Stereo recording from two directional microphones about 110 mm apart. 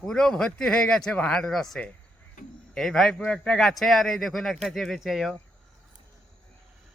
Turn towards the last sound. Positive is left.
turn(degrees=0)  # may be behind; listen again after turning